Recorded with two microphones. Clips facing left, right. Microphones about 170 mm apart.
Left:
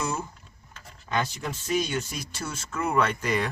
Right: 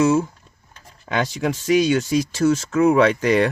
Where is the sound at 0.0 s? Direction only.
90° right.